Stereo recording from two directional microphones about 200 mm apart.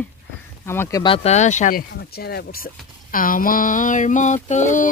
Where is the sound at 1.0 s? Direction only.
30° left (ahead or behind).